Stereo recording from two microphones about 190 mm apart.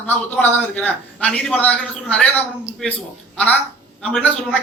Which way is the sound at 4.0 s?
5° left (ahead or behind).